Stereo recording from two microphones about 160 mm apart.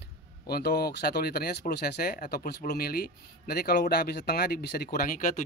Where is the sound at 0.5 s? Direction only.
80° left.